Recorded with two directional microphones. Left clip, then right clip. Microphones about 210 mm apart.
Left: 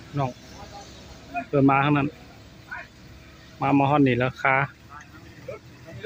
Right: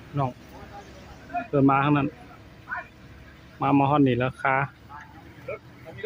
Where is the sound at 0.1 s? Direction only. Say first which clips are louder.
Even; centre (ahead or behind).